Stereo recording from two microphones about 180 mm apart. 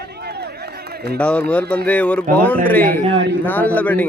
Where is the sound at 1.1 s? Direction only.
5° left (ahead or behind).